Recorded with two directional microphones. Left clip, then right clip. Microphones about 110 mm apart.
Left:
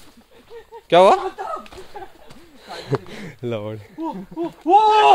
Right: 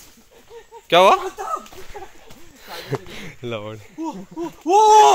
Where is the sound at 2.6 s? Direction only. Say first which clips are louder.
Left 3 dB; 40° left (ahead or behind).